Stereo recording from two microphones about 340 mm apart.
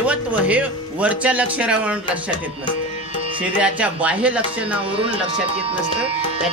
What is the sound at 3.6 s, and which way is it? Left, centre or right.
Speech, centre.